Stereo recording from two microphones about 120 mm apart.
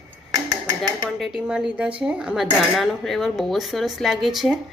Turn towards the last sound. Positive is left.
turn(degrees=0)  # may be behind; listen again after turning